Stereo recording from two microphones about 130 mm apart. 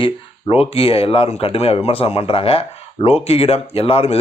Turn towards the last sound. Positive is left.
turn(degrees=50)  # may be behind; listen again after turning